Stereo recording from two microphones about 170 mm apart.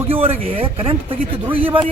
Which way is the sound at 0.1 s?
35° right (ahead or behind).